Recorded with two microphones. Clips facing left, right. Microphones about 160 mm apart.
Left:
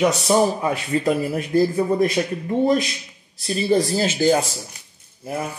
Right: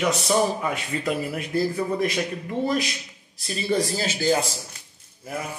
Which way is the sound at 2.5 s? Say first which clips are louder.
Left 7 dB; 30° left (ahead or behind).